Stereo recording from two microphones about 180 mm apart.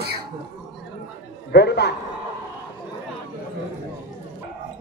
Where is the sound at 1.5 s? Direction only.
65° left (ahead or behind).